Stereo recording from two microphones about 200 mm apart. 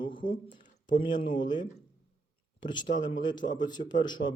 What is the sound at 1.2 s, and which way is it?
A man's voice, 20° left (ahead or behind).